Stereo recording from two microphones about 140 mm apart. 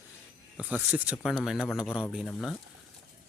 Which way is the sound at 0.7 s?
10° right (ahead or behind).